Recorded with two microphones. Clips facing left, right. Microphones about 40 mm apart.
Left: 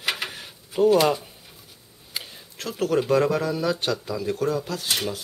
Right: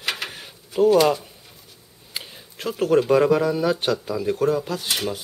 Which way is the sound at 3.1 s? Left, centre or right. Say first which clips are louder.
Right 4 dB; centre.